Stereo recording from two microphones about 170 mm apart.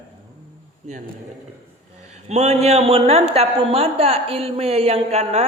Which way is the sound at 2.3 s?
40° right (ahead or behind).